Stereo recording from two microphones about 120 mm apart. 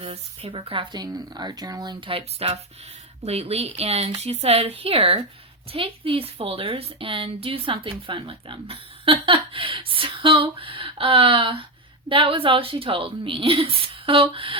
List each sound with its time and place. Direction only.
0.0 s a woman's voice: 50° right (ahead or behind)
0.9 s a woman's voice: 35° right (ahead or behind); by 14.6 s 50° right (ahead or behind)